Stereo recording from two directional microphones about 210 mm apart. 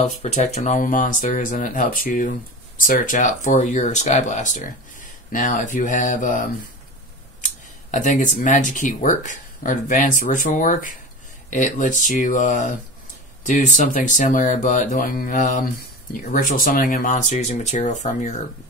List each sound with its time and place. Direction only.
0.2 s speech: 30° left (ahead or behind)
7.9 s speech: 35° left (ahead or behind)